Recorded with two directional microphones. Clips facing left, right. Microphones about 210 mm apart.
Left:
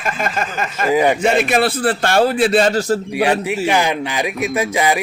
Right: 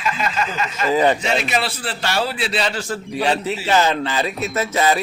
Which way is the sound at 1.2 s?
50° left (ahead or behind).